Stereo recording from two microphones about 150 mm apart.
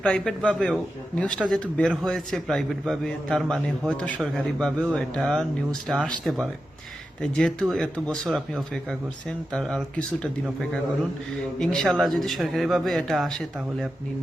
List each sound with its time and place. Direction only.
0.0 s a man's voice: 5° left (ahead or behind)